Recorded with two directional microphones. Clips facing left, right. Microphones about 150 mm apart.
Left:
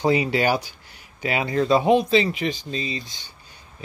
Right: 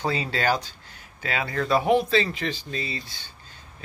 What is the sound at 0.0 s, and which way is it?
Speech, 15° left (ahead or behind).